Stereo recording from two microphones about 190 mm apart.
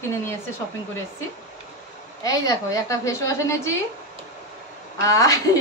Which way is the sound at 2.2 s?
20° left (ahead or behind).